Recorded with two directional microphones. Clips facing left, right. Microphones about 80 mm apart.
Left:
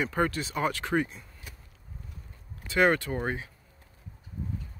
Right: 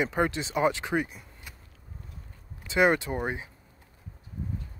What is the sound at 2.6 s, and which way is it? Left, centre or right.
Speech, centre.